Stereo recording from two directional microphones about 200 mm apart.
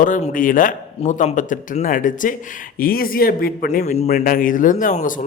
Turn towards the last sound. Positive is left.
turn(degrees=40)  # may be behind; listen again after turning